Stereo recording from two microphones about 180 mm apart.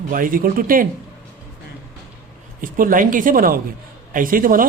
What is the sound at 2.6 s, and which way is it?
A man's voice, 50° right (ahead or behind).